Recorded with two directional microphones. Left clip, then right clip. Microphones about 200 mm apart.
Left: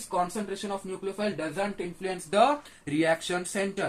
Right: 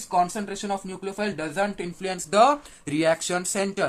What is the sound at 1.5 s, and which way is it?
Speech, 35° right (ahead or behind).